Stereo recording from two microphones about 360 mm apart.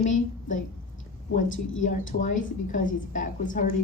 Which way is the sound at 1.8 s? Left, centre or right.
Left.